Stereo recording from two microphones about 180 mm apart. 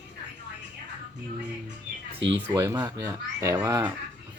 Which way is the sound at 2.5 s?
15° right (ahead or behind).